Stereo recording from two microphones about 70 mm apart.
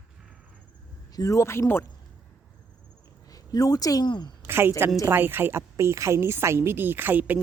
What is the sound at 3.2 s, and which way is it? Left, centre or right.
Speech, left.